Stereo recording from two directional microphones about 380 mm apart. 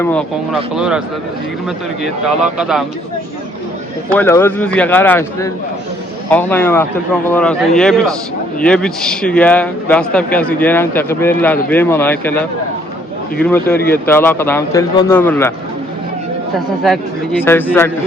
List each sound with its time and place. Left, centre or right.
0.0 s a man's voice: centre
2.2 s a man's voice: centre
4.1 s a man's voice: centre
17.4 s a man's voice: centre